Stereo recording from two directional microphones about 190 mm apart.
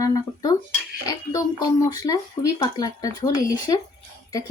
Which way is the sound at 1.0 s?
20° left (ahead or behind).